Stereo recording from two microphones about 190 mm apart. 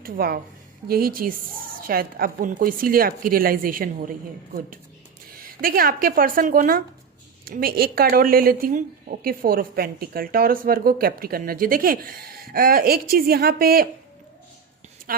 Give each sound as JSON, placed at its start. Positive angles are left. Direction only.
{"t": 0.0, "sound": "speech", "side_deg": -50}
{"t": 5.3, "sound": "speech", "side_deg": -50}